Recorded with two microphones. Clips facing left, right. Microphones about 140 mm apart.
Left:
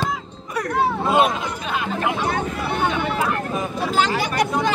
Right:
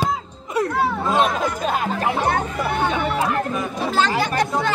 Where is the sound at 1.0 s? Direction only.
10° left (ahead or behind).